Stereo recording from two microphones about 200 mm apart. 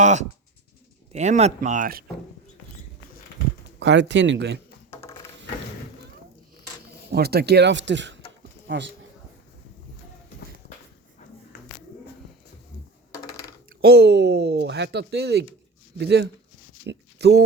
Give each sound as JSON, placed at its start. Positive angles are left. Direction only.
{"t": 0.0, "sound": "speech", "side_deg": -35}
{"t": 3.8, "sound": "speech", "side_deg": -60}
{"t": 4.9, "sound": "a sound", "side_deg": 15}
{"t": 7.1, "sound": "speech", "side_deg": -55}
{"t": 11.5, "sound": "a sound", "side_deg": 60}
{"t": 13.1, "sound": "computer keyboard", "side_deg": 15}
{"t": 13.8, "sound": "speech", "side_deg": -55}